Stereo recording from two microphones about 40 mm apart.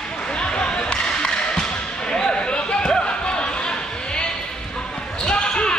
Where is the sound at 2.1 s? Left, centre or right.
Centre.